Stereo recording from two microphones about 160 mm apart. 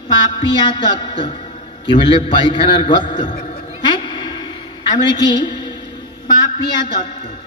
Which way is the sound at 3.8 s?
30° left (ahead or behind).